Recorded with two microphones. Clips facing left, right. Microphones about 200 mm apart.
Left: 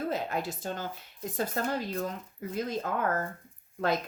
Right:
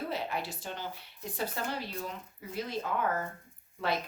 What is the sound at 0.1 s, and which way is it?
Speech, 45° left (ahead or behind).